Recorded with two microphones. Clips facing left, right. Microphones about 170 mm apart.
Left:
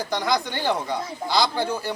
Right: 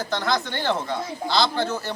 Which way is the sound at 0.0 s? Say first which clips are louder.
Left 1 dB; 10° left (ahead or behind).